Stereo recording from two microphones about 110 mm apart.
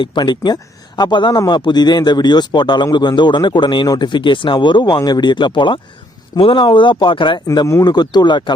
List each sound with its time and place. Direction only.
0.0 s speech: 45° left (ahead or behind)
7.4 s speech: 30° left (ahead or behind)